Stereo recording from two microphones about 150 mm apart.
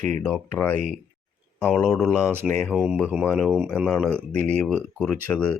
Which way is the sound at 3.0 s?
10° right (ahead or behind).